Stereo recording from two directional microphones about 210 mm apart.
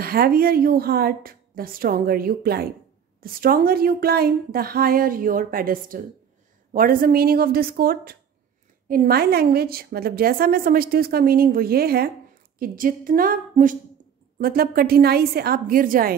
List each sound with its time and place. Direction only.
0.0 s a woman's voice: 45° right (ahead or behind)